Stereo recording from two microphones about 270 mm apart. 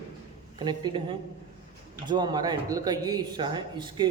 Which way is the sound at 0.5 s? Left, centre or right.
Centre.